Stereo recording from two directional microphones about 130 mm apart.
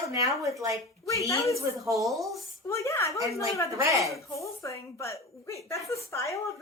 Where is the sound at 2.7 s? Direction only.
20° left (ahead or behind).